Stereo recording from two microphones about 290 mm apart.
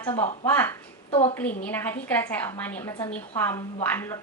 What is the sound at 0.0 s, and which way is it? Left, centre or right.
A woman's voice, centre.